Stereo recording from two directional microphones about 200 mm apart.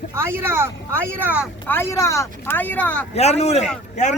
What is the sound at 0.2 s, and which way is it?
Speech, 10° right (ahead or behind).